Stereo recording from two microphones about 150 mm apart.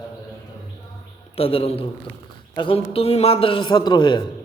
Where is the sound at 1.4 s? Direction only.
40° left (ahead or behind).